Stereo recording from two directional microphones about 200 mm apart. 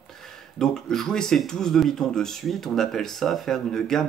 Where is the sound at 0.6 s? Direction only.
Centre (ahead or behind).